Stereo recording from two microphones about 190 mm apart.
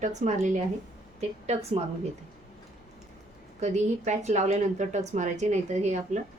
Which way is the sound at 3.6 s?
40° right (ahead or behind).